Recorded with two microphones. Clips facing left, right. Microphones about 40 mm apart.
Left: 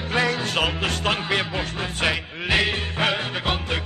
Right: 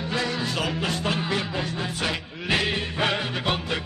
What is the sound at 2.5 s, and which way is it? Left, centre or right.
Music, centre.